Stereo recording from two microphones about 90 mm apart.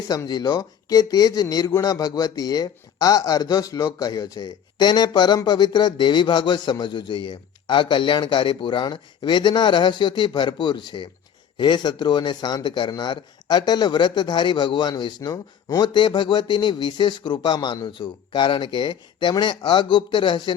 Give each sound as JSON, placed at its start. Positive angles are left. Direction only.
{"t": 0.3, "sound": "a man's voice", "side_deg": 50}